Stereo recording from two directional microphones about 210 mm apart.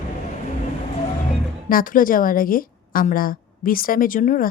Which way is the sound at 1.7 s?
40° left (ahead or behind).